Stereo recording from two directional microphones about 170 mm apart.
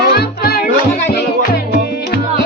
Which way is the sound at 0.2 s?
65° left (ahead or behind).